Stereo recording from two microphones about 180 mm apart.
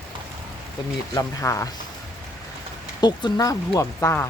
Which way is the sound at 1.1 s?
15° left (ahead or behind).